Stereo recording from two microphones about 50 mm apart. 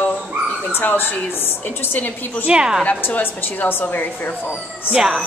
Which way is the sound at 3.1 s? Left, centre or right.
Left.